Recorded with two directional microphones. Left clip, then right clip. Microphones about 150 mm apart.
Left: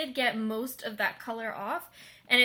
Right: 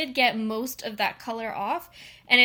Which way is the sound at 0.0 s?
30° right (ahead or behind).